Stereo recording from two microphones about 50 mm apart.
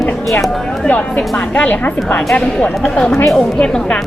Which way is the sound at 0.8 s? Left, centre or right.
Left.